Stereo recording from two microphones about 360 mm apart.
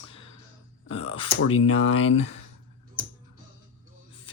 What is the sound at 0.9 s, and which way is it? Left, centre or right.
Speech, centre.